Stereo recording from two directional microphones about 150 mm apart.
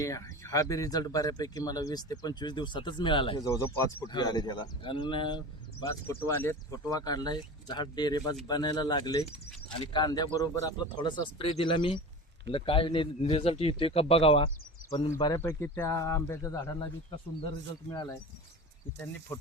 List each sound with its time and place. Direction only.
0.0 s speech: 20° left (ahead or behind)
5.8 s a man's voice: 20° left (ahead or behind); by 15.1 s 35° left (ahead or behind)
15.1 s speech: 20° left (ahead or behind)
19.3 s speech: 15° left (ahead or behind)